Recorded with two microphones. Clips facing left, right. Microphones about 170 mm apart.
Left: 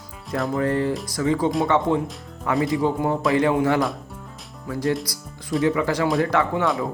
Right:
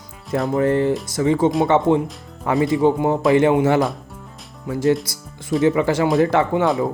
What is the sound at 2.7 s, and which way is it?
Speech, 25° right (ahead or behind).